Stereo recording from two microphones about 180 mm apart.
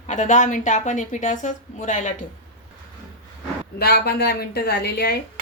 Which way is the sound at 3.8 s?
60° left (ahead or behind).